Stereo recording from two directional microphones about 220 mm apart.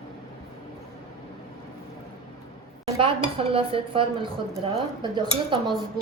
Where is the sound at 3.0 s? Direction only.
25° right (ahead or behind).